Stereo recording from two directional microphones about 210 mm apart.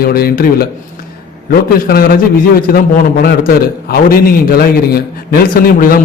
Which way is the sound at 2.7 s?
45° left (ahead or behind).